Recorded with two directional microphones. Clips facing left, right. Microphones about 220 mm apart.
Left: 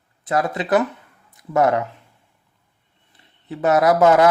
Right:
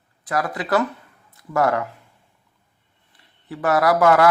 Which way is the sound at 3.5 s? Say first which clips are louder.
Left 2 dB; 20° left (ahead or behind).